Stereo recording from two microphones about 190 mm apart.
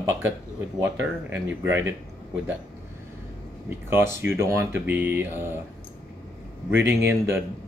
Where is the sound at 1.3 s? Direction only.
10° right (ahead or behind).